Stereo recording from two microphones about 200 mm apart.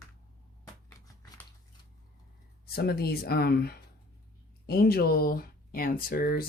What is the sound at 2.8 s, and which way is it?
Speech, 50° left (ahead or behind).